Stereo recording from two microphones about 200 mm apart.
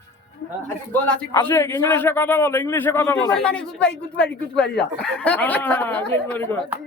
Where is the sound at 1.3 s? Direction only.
15° left (ahead or behind).